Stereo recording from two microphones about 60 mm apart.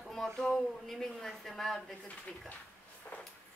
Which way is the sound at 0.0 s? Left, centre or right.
Centre.